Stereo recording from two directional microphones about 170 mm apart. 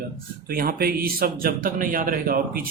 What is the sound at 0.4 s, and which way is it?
A man's voice, 60° right (ahead or behind).